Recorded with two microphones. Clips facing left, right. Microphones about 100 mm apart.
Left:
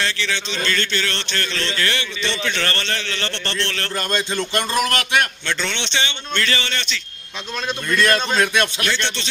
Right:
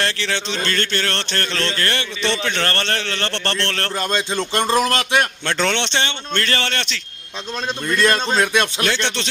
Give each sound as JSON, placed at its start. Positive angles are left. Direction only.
{"t": 0.0, "sound": "a man's voice", "side_deg": -50}
{"t": 2.3, "sound": "a man's voice", "side_deg": -35}
{"t": 3.9, "sound": "a man's voice", "side_deg": -20}
{"t": 5.6, "sound": "speech", "side_deg": -60}
{"t": 8.0, "sound": "a man's voice", "side_deg": -25}
{"t": 9.0, "sound": "speech", "side_deg": -90}